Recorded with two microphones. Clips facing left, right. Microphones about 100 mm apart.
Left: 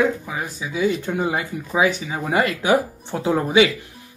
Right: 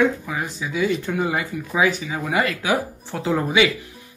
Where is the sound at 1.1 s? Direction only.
20° left (ahead or behind).